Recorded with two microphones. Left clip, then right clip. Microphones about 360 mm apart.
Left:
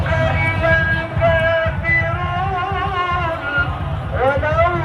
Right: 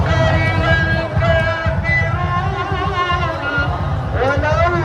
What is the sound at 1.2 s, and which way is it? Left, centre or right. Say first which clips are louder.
Music: left 3 dB; centre.